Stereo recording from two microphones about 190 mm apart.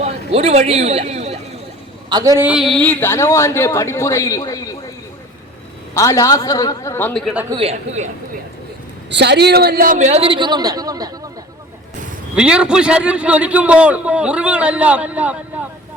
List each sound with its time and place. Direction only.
0.0 s a man's voice: 35° right (ahead or behind)
2.0 s a man's voice: 20° right (ahead or behind)
2.5 s speech: centre (ahead or behind); by 4.8 s 15° left (ahead or behind)
5.9 s speech: 15° left (ahead or behind)
7.5 s a man's voice: 30° right (ahead or behind)
9.0 s a man's voice: 65° right (ahead or behind); by 11.1 s 20° right (ahead or behind)
12.4 s a man's voice: 5° right (ahead or behind)